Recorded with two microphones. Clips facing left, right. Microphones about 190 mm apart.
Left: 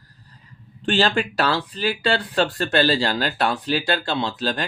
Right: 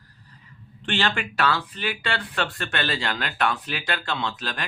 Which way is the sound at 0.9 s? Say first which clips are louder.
Left 6 dB; 35° left (ahead or behind).